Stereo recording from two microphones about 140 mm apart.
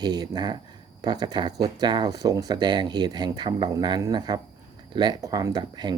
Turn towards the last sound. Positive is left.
turn(degrees=-30)  # may be behind; listen again after turning